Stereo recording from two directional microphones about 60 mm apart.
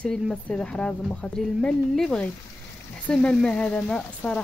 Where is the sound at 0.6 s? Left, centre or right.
Centre.